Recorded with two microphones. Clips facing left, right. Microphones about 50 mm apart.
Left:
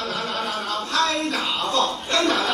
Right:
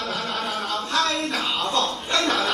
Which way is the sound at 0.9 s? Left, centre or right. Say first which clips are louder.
Left 2 dB; centre.